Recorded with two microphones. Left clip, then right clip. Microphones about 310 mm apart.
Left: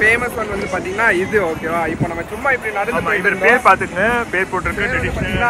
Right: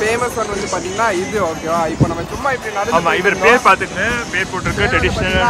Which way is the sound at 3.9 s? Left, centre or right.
Centre.